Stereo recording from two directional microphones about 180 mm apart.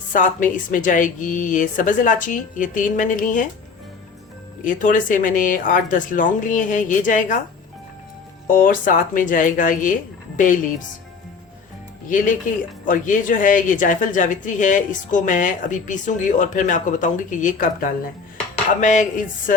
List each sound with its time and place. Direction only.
0.1 s a woman's voice: 45° left (ahead or behind)
4.6 s a woman's voice: 45° left (ahead or behind)
8.4 s a woman's voice: 50° left (ahead or behind)
12.8 s a woman's voice: 45° left (ahead or behind)